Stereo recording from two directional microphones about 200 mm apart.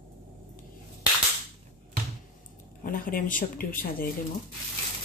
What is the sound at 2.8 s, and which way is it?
Speech, 45° left (ahead or behind).